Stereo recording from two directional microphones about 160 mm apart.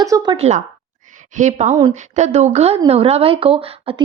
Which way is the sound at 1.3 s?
50° right (ahead or behind).